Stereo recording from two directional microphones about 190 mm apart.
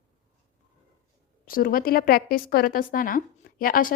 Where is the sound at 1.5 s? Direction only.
50° left (ahead or behind).